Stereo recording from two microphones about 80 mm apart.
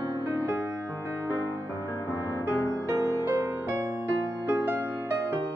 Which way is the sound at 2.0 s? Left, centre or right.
Left.